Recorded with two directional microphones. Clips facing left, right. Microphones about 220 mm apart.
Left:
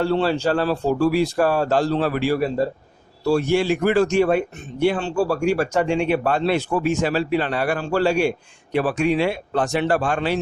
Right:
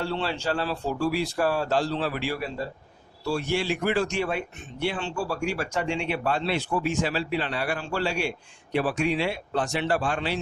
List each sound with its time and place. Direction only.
0.0 s speech: 45° left (ahead or behind)